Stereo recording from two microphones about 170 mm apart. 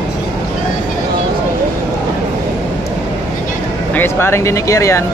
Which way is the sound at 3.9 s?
15° left (ahead or behind).